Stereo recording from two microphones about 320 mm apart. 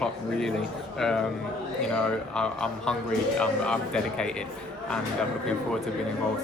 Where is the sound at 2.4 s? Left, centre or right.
Centre.